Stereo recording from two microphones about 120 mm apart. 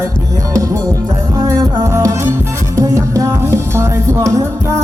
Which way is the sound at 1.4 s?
30° right (ahead or behind).